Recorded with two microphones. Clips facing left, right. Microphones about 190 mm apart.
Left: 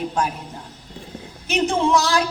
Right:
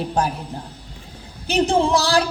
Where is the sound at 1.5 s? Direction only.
35° right (ahead or behind).